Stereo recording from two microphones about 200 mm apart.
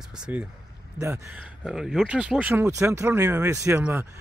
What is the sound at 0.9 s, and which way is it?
Speech, 15° right (ahead or behind).